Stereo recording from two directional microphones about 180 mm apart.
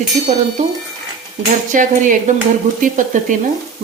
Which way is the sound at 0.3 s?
40° right (ahead or behind).